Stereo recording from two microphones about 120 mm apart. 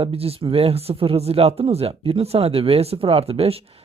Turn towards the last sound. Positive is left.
turn(degrees=-55)  # may be behind; listen again after turning